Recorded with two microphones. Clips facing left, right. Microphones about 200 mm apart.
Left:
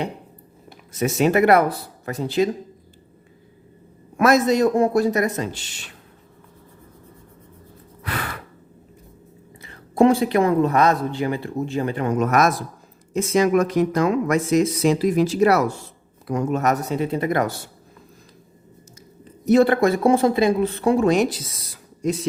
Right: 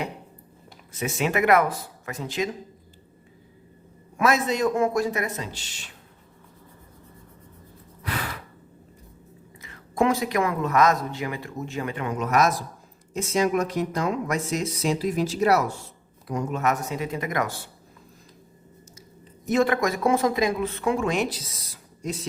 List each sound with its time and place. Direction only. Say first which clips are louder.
0.9 s speech: left 7 dB; 40° left (ahead or behind)
4.2 s speech: left 6 dB; 40° left (ahead or behind)
9.6 s speech: left 7 dB; 35° left (ahead or behind); by 12.5 s 50° left (ahead or behind)
13.1 s speech: left 5 dB; 70° left (ahead or behind)
16.5 s speech: left 4 dB; 40° left (ahead or behind)
19.5 s speech: left 7 dB; 35° left (ahead or behind)